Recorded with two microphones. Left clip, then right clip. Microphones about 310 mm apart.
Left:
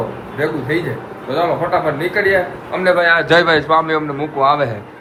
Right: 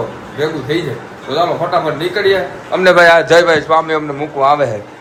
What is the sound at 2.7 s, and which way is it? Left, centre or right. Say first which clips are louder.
Speech: right 6 dB; right.